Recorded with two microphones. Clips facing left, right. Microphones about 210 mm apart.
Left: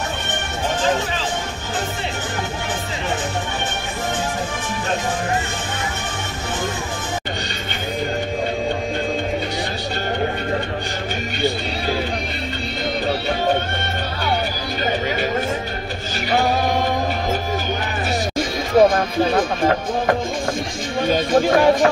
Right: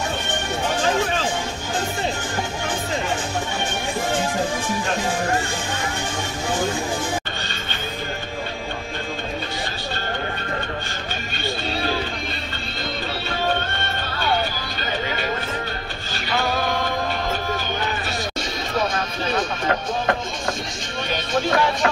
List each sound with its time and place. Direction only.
18.8 s music: 50° left (ahead or behind)
21.1 s music: 45° left (ahead or behind)